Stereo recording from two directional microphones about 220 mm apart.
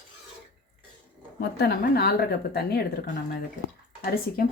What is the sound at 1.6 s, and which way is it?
A woman's voice, 45° left (ahead or behind).